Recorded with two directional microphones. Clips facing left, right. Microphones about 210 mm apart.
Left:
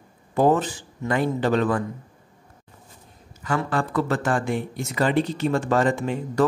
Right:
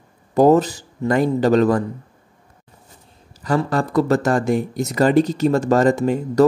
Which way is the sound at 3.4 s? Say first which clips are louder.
Right 5 dB; 35° right (ahead or behind).